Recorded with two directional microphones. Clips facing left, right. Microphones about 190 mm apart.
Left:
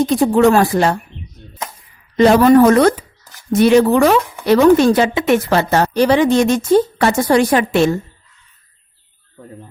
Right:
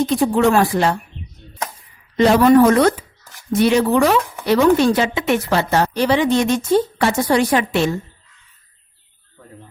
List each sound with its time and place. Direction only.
0.1 s speech: 45° left (ahead or behind)
2.1 s speech: 45° left (ahead or behind)